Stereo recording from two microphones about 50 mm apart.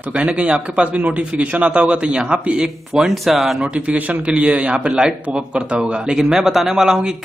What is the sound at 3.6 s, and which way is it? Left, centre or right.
A man's voice, right.